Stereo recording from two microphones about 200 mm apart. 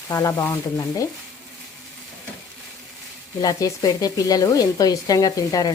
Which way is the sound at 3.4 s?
20° left (ahead or behind).